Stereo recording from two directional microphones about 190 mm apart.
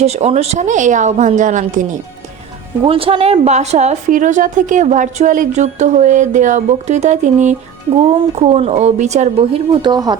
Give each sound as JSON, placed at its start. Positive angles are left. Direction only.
{"t": 0.0, "sound": "a woman's voice", "side_deg": -35}
{"t": 2.8, "sound": "a woman's voice", "side_deg": -30}